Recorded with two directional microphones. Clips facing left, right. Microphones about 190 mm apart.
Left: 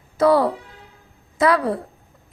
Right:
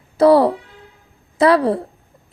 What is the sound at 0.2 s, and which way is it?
Speech, 35° right (ahead or behind).